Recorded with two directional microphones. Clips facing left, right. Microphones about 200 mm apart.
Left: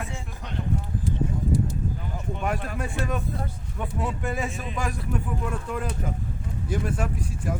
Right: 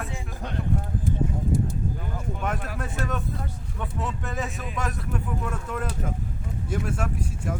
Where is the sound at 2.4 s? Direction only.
Centre (ahead or behind).